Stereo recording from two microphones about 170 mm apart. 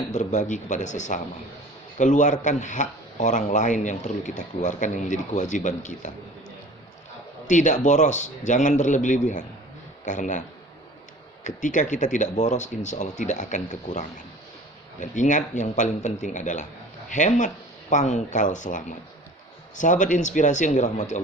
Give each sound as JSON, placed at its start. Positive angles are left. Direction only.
{"t": 0.1, "sound": "speech", "side_deg": 45}
{"t": 7.4, "sound": "speech", "side_deg": 45}
{"t": 11.4, "sound": "speech", "side_deg": 45}
{"t": 15.1, "sound": "speech", "side_deg": 45}